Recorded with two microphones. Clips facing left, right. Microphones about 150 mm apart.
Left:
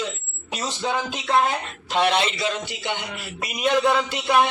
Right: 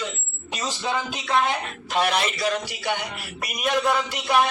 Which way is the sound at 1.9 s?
25° left (ahead or behind).